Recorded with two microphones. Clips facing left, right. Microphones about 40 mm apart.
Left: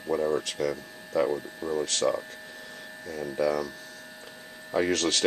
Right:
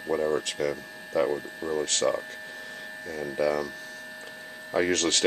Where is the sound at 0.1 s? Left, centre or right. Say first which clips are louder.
Even; centre.